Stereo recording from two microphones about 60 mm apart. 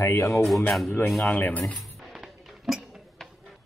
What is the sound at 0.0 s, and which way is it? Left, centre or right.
Speech, left.